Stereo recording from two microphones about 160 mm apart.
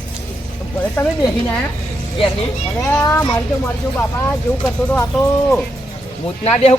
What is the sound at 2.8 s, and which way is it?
A man's voice, 15° left (ahead or behind).